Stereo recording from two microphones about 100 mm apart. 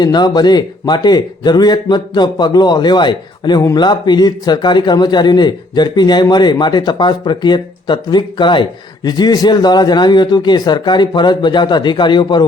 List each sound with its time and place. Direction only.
0.0 s a man's voice: 45° left (ahead or behind)